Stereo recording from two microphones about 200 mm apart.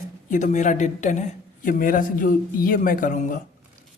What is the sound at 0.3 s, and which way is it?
A man's voice, 35° left (ahead or behind).